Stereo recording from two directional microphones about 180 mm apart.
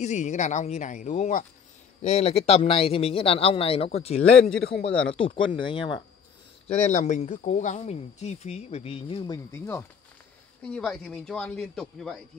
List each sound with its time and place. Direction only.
0.0 s speech: 40° left (ahead or behind)
6.7 s speech: 40° left (ahead or behind); by 12.2 s centre (ahead or behind)